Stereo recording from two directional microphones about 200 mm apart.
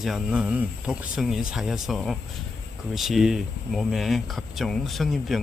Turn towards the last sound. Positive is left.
turn(degrees=0)  # may be behind; listen again after turning